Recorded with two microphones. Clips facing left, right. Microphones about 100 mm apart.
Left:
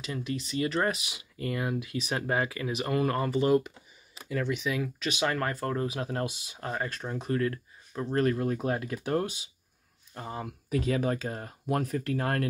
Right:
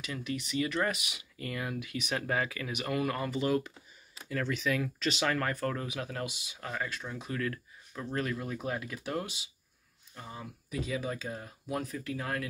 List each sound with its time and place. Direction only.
0.0 s speech: 30° left (ahead or behind)
4.3 s speech: 15° left (ahead or behind); by 7.4 s 40° left (ahead or behind)
7.4 s a sound: 30° left (ahead or behind)
8.2 s speech: 45° left (ahead or behind)
10.1 s speech: 60° left (ahead or behind)